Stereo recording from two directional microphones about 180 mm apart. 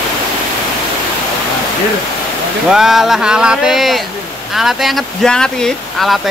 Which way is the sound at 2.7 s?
Centre (ahead or behind).